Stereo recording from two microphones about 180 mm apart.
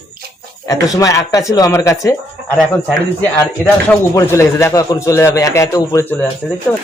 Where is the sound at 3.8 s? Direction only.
15° left (ahead or behind).